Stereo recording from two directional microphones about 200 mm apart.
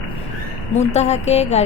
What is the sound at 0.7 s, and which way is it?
Speech, 35° left (ahead or behind).